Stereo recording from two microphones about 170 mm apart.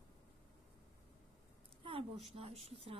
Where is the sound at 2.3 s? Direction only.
35° right (ahead or behind).